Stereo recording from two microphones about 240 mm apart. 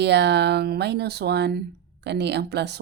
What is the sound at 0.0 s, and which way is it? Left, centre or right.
Speech, right.